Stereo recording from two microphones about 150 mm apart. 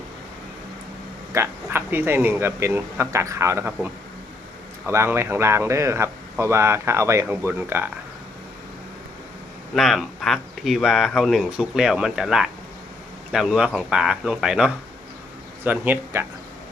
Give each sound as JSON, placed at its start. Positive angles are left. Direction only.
{"t": 1.3, "sound": "speech", "side_deg": -15}
{"t": 9.7, "sound": "speech", "side_deg": 0}